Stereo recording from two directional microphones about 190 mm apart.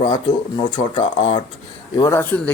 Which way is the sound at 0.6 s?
25° left (ahead or behind).